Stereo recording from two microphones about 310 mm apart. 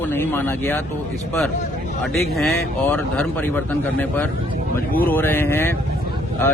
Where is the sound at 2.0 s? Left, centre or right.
Centre.